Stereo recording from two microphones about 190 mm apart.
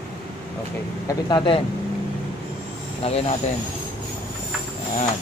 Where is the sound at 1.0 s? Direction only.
25° left (ahead or behind).